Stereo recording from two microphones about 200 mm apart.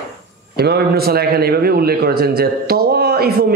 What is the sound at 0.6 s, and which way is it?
A man's voice, 50° right (ahead or behind).